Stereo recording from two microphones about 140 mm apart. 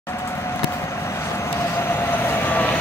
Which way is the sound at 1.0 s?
20° left (ahead or behind).